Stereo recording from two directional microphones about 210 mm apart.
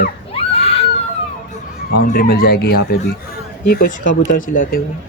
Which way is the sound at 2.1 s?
50° left (ahead or behind).